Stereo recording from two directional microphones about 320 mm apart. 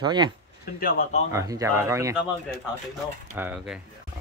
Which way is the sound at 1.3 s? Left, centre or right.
Centre.